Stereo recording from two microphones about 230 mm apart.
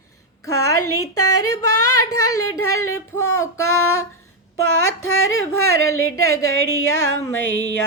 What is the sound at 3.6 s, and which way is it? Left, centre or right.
Female singing, left.